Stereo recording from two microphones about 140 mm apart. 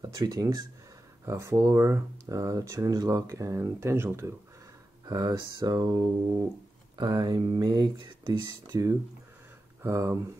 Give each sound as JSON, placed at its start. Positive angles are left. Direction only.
{"t": 0.0, "sound": "speech", "side_deg": -25}
{"t": 5.0, "sound": "speech", "side_deg": -30}
{"t": 7.0, "sound": "speech", "side_deg": -30}